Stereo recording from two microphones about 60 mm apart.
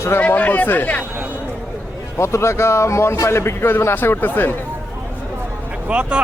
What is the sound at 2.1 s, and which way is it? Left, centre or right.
A man's voice, left.